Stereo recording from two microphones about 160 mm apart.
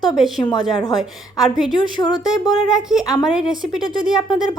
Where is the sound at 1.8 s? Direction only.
25° left (ahead or behind).